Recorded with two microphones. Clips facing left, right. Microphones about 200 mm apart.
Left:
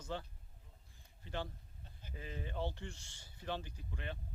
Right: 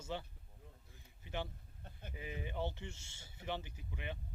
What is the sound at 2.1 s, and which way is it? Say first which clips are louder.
Speech: right 1 dB; 15° right (ahead or behind).